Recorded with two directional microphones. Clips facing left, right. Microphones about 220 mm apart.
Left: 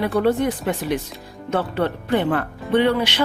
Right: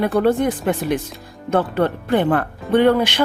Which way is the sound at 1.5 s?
50° right (ahead or behind).